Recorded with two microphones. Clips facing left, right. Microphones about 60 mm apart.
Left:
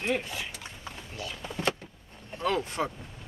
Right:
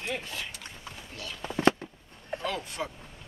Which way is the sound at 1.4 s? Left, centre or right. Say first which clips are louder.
Right 7 dB; right.